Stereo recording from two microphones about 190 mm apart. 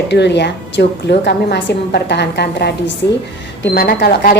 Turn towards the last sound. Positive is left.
turn(degrees=55)  # may be behind; listen again after turning